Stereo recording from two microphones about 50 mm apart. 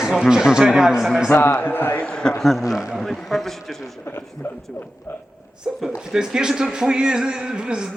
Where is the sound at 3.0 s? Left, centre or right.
Centre.